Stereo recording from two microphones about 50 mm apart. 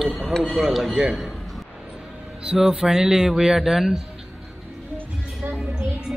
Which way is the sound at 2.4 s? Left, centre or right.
Centre.